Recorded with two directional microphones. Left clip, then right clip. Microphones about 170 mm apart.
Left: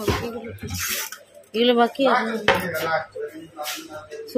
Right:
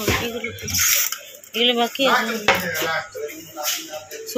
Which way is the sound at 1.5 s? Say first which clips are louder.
Left 1 dB; 30° left (ahead or behind).